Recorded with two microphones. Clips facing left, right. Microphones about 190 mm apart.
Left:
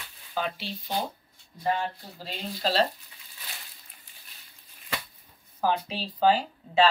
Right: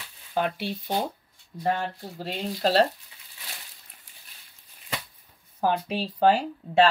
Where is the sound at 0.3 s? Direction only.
60° right (ahead or behind).